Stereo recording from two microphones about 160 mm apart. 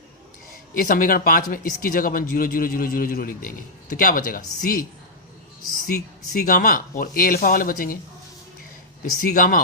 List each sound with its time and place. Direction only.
0.7 s speech: 60° left (ahead or behind)
9.2 s speech: 60° left (ahead or behind)